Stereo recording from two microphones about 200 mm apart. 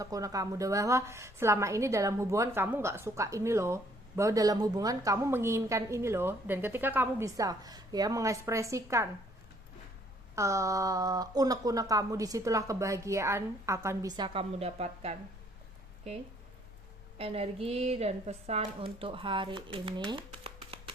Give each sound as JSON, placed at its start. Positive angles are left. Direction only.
{"t": 0.0, "sound": "a woman's voice", "side_deg": -15}
{"t": 10.3, "sound": "a woman's voice", "side_deg": -15}
{"t": 14.3, "sound": "speech", "side_deg": -30}
{"t": 17.2, "sound": "speech", "side_deg": -30}